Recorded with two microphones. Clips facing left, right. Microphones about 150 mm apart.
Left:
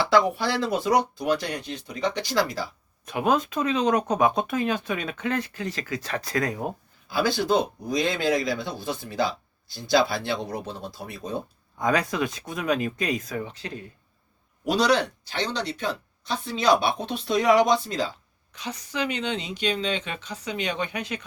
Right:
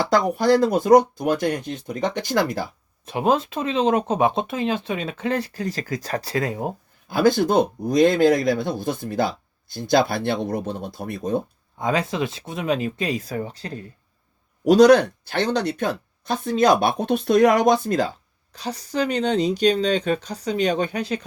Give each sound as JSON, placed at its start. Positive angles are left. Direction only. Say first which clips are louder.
{"t": 0.0, "sound": "speech", "louder": "right 2 dB", "side_deg": -45}
{"t": 3.1, "sound": "speech", "louder": "right 3 dB", "side_deg": -30}
{"t": 7.1, "sound": "speech", "louder": "right 5 dB", "side_deg": -50}
{"t": 11.8, "sound": "speech", "louder": "right 1 dB", "side_deg": -25}
{"t": 18.5, "sound": "speech", "louder": "right 6 dB", "side_deg": -35}